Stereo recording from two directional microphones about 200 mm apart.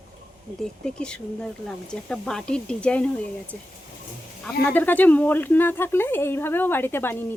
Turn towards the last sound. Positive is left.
turn(degrees=10)  # may be behind; listen again after turning